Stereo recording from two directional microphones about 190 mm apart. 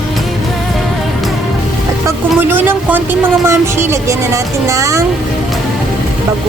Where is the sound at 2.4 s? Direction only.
10° right (ahead or behind).